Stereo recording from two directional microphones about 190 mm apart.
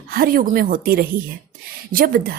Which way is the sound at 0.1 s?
50° right (ahead or behind).